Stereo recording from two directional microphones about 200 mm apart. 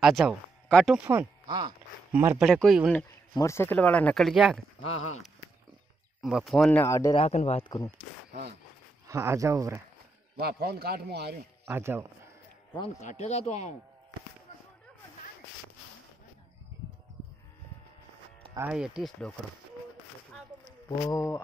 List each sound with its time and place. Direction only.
0.0 s speech: centre (ahead or behind)
1.0 s speech: 20° right (ahead or behind)
2.4 s speech: centre (ahead or behind)
3.3 s speech: 15° left (ahead or behind)
4.8 s speech: 35° left (ahead or behind)
6.2 s speech: centre (ahead or behind); by 7.2 s 15° left (ahead or behind)
7.2 s speech: 35° left (ahead or behind)
9.0 s speech: 15° right (ahead or behind)
10.3 s a man's voice: 55° right (ahead or behind)
11.6 s speech: 10° right (ahead or behind)
13.0 s speech: 35° left (ahead or behind)
18.6 s speech: 5° right (ahead or behind)
21.0 s speech: 15° left (ahead or behind)